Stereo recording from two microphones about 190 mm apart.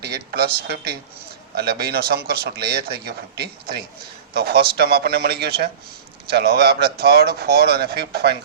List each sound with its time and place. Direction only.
0.0 s speech: 55° right (ahead or behind)